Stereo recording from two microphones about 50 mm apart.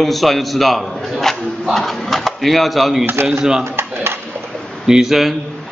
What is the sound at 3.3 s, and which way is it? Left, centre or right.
Speech, centre.